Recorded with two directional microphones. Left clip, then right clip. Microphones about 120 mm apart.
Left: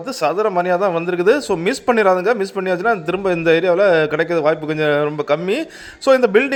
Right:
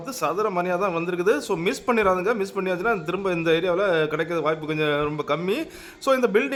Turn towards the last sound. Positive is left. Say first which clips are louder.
# left 7 dB
turn(degrees=30)  # may be behind; listen again after turning